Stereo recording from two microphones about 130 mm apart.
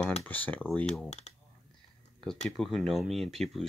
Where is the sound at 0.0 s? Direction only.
10° left (ahead or behind).